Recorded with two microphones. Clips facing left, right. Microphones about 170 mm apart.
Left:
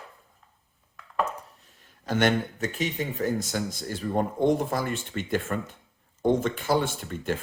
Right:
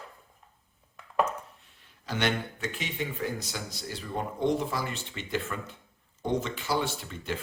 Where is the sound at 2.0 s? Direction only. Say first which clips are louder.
Left 6 dB; 50° left (ahead or behind).